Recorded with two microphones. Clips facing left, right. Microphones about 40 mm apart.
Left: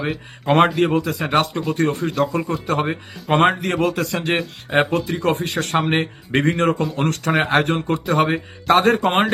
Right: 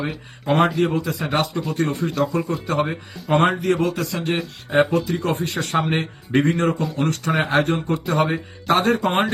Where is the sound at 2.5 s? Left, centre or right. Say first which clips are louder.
Left 1 dB; left.